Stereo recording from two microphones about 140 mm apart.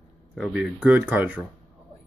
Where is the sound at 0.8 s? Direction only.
10° right (ahead or behind).